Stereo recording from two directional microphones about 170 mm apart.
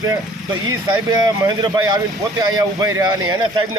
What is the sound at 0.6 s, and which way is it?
Speech, 25° right (ahead or behind).